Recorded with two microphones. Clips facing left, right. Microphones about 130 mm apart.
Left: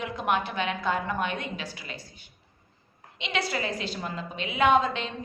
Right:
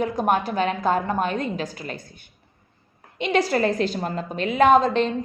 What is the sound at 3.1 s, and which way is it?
A woman's voice, 45° right (ahead or behind).